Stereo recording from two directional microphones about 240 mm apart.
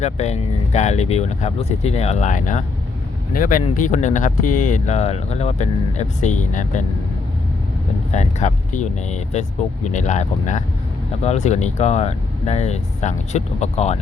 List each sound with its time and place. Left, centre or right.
0.0 s speech: left
8.1 s speech: left